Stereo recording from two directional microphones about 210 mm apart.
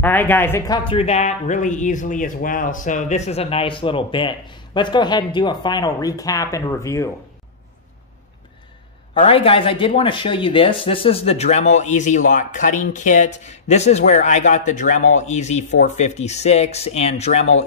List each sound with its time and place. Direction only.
0.0 s speech: 10° left (ahead or behind)
9.1 s speech: 25° left (ahead or behind)